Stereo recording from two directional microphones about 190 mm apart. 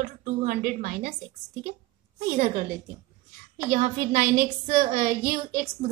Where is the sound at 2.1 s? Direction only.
45° right (ahead or behind).